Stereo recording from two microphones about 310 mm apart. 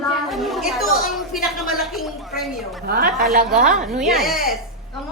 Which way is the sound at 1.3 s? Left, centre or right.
Centre.